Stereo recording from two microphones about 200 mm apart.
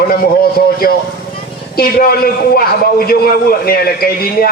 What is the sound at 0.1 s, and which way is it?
A man's voice, 50° left (ahead or behind).